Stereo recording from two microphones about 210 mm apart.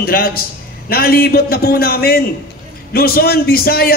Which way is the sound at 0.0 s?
45° left (ahead or behind).